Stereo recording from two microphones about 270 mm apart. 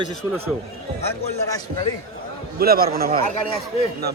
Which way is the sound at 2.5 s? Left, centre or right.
Right.